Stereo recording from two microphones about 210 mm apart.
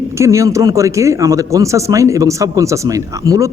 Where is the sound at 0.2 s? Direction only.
15° right (ahead or behind).